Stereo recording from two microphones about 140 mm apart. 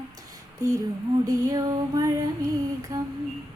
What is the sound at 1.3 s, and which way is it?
Music, 25° right (ahead or behind).